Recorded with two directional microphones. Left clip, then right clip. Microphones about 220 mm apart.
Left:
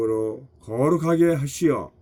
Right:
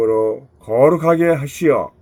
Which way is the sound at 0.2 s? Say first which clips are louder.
Right 9 dB; centre (ahead or behind).